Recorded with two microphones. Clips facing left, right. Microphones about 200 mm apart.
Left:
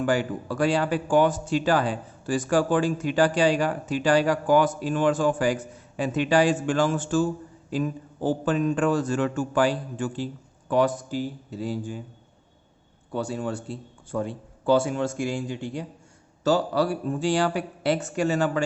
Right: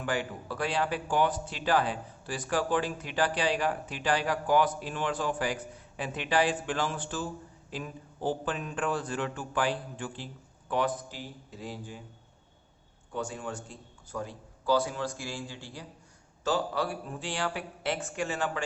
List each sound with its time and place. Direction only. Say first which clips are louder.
0.0 s a man's voice: left 8 dB; 40° left (ahead or behind)
8.3 s a man's voice: left 9 dB; 45° left (ahead or behind)
13.1 s speech: left 7 dB; 35° left (ahead or behind)
16.4 s speech: left 7 dB; 40° left (ahead or behind)